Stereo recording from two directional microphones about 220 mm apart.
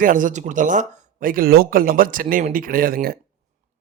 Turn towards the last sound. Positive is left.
turn(degrees=-45)  # may be behind; listen again after turning